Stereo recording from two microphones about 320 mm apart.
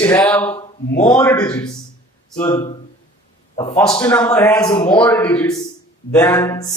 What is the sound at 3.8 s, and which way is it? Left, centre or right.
A man's voice, centre.